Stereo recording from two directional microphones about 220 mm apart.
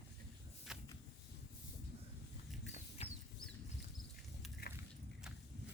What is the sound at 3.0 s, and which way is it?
Chicken, 25° left (ahead or behind).